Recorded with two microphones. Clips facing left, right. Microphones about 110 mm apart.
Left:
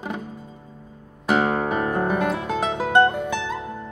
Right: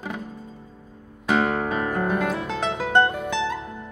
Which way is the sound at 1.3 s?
10° left (ahead or behind).